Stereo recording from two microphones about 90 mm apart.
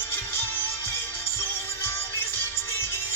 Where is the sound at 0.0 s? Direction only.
25° left (ahead or behind).